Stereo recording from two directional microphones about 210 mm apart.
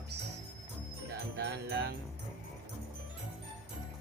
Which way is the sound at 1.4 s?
55° right (ahead or behind).